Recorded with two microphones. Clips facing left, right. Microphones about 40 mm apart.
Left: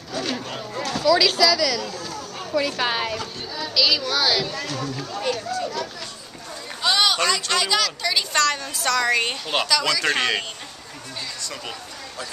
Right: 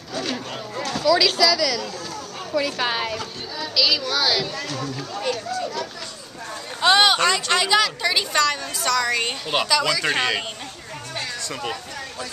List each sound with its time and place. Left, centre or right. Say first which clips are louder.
1.0 s speech: even; centre
6.8 s speech: right 4 dB; right
7.2 s speech: right 2 dB; centre
8.3 s a woman's voice: even; centre
11.4 s speech: right 4 dB; centre